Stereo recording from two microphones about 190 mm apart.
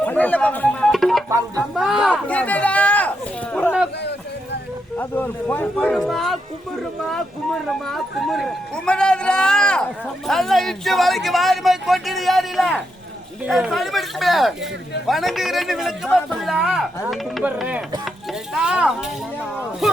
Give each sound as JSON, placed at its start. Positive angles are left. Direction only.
{"t": 0.0, "sound": "speech", "side_deg": 10}
{"t": 1.3, "sound": "speech", "side_deg": -15}
{"t": 1.7, "sound": "speech", "side_deg": 0}
{"t": 3.9, "sound": "a sound", "side_deg": 65}
{"t": 4.9, "sound": "speech", "side_deg": 10}
{"t": 7.7, "sound": "speech", "side_deg": 0}